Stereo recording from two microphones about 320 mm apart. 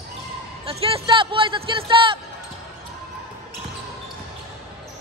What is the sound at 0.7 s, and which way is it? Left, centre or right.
A man's voice, centre.